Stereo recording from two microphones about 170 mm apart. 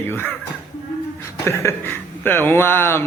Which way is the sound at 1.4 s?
15° left (ahead or behind).